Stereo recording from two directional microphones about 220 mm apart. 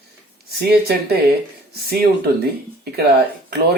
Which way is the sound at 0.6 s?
45° right (ahead or behind).